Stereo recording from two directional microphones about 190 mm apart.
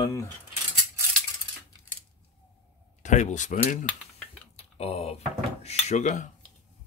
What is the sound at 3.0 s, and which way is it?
Speech, 40° left (ahead or behind).